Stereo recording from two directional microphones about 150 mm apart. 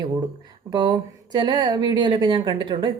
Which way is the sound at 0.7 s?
30° right (ahead or behind).